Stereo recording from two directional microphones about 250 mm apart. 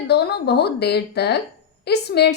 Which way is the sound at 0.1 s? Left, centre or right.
Left.